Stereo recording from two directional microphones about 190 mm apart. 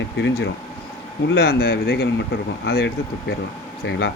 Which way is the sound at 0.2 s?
60° left (ahead or behind).